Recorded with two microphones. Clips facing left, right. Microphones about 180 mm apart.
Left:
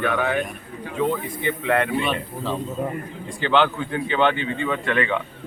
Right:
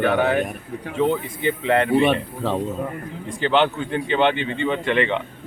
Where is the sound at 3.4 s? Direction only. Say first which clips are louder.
Right 1 dB; 25° right (ahead or behind).